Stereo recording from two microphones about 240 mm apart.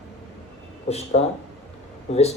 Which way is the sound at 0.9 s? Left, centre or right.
Left.